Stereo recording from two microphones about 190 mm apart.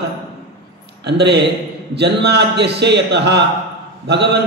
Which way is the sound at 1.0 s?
60° right (ahead or behind).